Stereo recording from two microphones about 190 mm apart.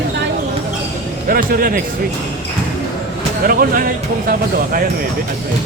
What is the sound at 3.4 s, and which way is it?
Speech, 50° right (ahead or behind).